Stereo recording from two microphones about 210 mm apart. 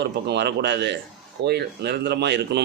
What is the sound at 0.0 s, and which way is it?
A man's voice, 55° right (ahead or behind).